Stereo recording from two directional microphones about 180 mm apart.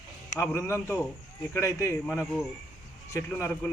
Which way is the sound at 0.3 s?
15° left (ahead or behind).